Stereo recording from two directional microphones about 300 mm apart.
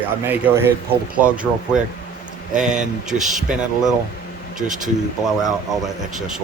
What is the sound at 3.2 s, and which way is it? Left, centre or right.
Speech, centre.